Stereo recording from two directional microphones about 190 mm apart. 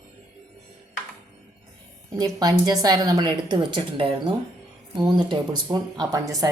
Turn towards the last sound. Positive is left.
turn(degrees=-20)  # may be behind; listen again after turning